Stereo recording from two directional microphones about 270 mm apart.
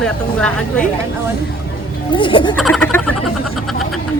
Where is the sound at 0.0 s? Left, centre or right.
Centre.